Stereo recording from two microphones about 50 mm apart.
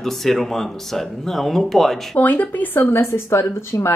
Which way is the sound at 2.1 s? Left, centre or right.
Left.